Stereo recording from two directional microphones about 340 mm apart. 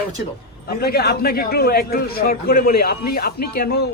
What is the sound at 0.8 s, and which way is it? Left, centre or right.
Speech, left.